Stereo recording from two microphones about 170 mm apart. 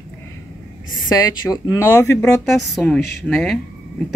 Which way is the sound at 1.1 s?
20° left (ahead or behind).